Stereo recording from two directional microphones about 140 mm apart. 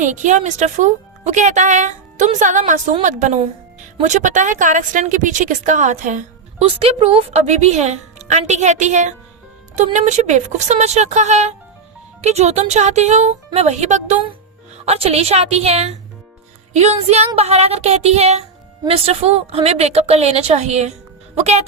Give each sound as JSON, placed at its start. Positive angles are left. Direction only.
{"t": 0.0, "sound": "speech", "side_deg": -65}
{"t": 6.7, "sound": "a woman's voice", "side_deg": -45}
{"t": 14.8, "sound": "a woman's voice", "side_deg": -45}